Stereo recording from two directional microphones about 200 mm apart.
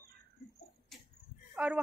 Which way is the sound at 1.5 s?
5° right (ahead or behind).